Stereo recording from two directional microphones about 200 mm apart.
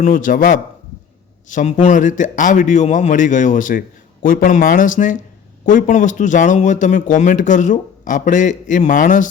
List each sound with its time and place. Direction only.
0.0 s a man's voice: 40° left (ahead or behind)